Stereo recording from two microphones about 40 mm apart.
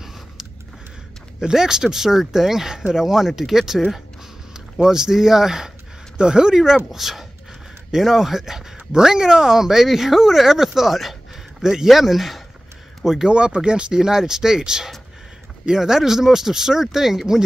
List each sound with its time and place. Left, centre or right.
1.4 s speech: centre
13.3 s speech: right; by 17.2 s centre